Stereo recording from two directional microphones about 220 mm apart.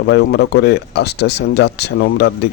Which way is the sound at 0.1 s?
50° left (ahead or behind).